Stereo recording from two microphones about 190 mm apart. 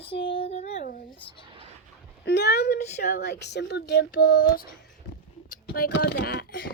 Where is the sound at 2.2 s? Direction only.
60° left (ahead or behind).